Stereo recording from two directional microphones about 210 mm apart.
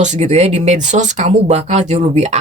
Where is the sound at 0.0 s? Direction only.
35° right (ahead or behind).